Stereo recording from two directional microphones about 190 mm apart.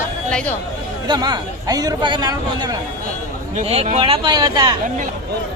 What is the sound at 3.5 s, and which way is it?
A man's voice, 35° right (ahead or behind).